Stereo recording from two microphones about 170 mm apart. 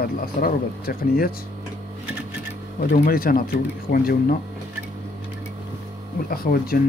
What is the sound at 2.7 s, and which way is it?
Speech, 60° left (ahead or behind).